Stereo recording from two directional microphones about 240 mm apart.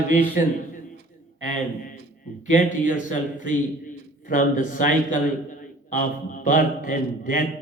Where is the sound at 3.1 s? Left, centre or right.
Left.